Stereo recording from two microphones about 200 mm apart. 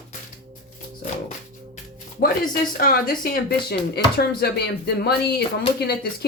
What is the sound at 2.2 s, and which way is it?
Speech, 50° left (ahead or behind).